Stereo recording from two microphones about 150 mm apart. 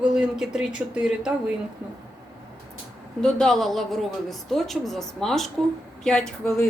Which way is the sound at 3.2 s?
5° left (ahead or behind).